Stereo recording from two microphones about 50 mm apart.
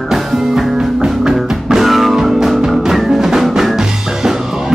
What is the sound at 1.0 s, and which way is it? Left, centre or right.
Music, centre.